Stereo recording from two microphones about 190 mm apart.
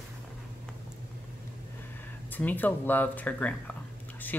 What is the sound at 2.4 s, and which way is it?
Speech, 10° left (ahead or behind).